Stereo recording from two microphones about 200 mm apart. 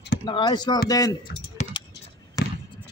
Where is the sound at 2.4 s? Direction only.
20° left (ahead or behind).